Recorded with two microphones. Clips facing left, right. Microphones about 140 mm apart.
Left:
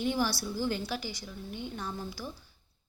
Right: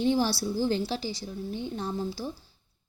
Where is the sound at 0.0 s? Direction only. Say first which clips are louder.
Right 5 dB; 30° right (ahead or behind).